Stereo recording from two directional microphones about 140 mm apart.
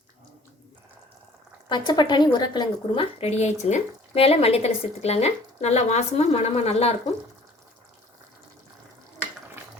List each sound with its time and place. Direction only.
1.7 s a woman's voice: 35° left (ahead or behind); by 6.9 s 50° left (ahead or behind)